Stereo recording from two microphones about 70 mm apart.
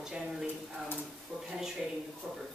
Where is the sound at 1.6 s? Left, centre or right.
Centre.